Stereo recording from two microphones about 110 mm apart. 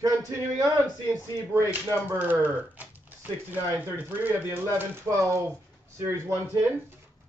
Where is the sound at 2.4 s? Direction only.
15° right (ahead or behind).